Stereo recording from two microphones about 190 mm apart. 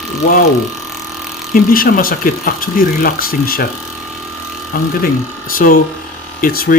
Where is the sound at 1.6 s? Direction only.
50° left (ahead or behind).